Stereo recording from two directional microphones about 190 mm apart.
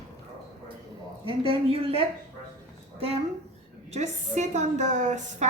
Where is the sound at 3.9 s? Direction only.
40° right (ahead or behind).